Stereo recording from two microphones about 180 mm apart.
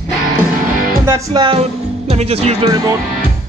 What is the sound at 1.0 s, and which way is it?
Music, 15° right (ahead or behind).